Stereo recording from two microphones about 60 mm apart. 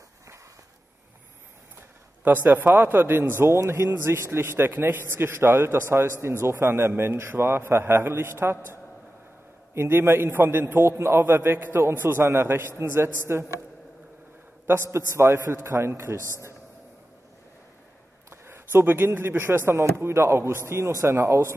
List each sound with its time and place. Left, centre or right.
1.8 s a man's voice: right
9.8 s a man's voice: right
14.7 s a man's voice: right
18.3 s a man's voice: right